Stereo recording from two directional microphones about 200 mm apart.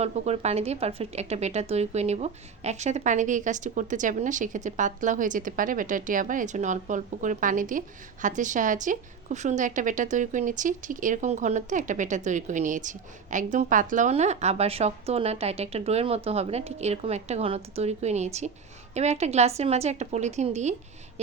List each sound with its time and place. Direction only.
0.0 s speech: 35° right (ahead or behind)